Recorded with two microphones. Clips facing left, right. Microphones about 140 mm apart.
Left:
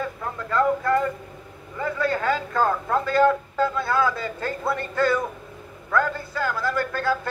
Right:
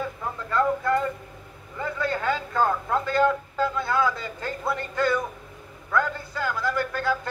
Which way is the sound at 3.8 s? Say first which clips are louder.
Left 2 dB; 20° right (ahead or behind).